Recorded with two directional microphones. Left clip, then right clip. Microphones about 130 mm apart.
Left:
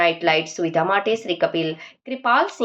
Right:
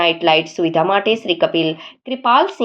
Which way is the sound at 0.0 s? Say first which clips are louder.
Right 4 dB; 15° right (ahead or behind).